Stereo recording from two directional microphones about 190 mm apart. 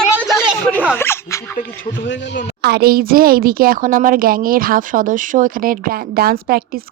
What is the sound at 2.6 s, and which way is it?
Speech, 55° right (ahead or behind).